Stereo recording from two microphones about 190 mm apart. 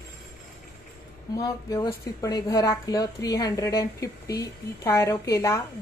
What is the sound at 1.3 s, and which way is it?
Speech, 20° left (ahead or behind).